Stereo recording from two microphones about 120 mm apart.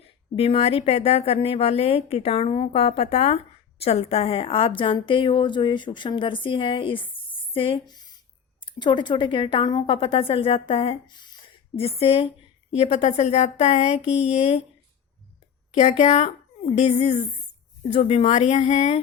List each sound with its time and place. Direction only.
0.3 s a woman's voice: 55° left (ahead or behind)
15.7 s speech: 65° left (ahead or behind)